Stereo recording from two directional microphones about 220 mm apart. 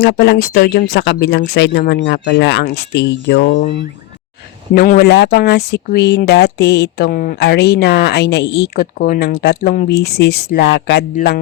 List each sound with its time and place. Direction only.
0.0 s speech: 50° left (ahead or behind)
4.7 s speech: 45° left (ahead or behind)